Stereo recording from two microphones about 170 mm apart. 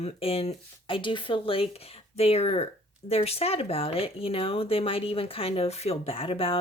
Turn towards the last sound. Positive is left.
turn(degrees=30)  # may be behind; listen again after turning